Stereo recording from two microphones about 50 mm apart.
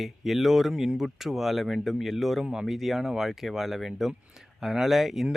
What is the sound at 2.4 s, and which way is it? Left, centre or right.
Speech, centre.